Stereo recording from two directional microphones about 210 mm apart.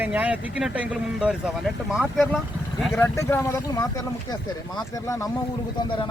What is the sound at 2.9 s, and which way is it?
Speech, 10° left (ahead or behind).